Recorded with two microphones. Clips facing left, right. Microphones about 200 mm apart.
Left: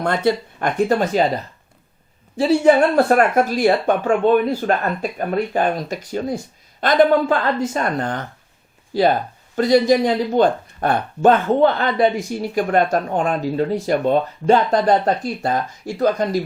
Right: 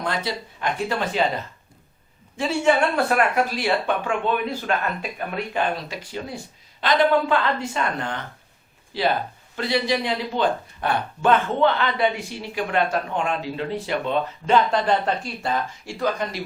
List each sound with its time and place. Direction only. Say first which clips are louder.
0.0 s speech: left 8 dB; 55° left (ahead or behind)
2.3 s speech: left 7 dB; 35° left (ahead or behind)